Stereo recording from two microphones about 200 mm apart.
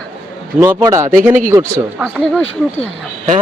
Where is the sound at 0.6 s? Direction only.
15° right (ahead or behind).